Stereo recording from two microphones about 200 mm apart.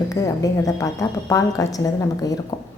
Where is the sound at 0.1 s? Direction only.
15° left (ahead or behind).